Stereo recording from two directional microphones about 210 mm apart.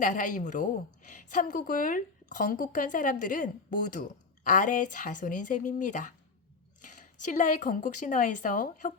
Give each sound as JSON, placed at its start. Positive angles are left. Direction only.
{"t": 0.0, "sound": "a woman's voice", "side_deg": 40}
{"t": 6.8, "sound": "a sound", "side_deg": 40}
{"t": 7.3, "sound": "a woman's voice", "side_deg": 35}